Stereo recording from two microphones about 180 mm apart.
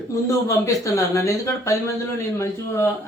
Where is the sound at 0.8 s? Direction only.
15° left (ahead or behind).